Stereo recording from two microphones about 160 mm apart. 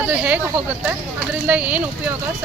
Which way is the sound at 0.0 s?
10° right (ahead or behind).